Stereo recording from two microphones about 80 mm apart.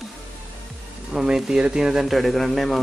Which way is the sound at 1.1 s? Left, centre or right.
Centre.